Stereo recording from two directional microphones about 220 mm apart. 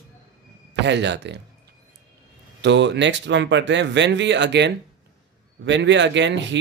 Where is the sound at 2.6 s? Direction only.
55° right (ahead or behind).